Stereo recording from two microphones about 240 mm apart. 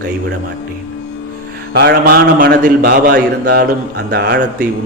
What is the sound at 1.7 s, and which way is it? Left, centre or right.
A man's voice, right.